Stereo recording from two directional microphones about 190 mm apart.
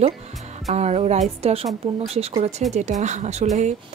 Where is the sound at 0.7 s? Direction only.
35° right (ahead or behind).